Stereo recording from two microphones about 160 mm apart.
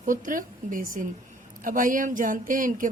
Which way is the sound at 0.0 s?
55° right (ahead or behind).